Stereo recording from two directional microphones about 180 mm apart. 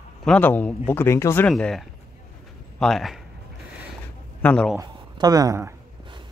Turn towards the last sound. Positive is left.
turn(degrees=-15)  # may be behind; listen again after turning